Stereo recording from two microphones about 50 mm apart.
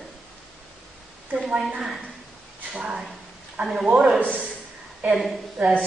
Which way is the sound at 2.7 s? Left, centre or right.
Centre.